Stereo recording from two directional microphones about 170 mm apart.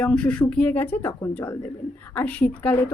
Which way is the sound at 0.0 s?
5° left (ahead or behind).